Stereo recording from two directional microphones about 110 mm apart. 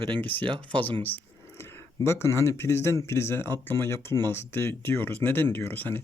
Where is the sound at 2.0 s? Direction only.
25° left (ahead or behind).